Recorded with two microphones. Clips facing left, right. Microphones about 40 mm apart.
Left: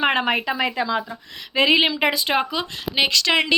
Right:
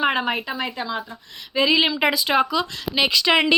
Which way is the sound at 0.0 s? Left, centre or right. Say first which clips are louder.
Left 2 dB; left.